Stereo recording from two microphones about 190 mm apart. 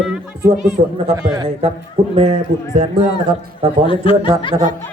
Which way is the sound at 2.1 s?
35° right (ahead or behind).